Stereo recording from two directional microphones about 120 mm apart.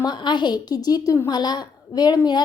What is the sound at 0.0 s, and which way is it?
A woman's voice, 35° left (ahead or behind).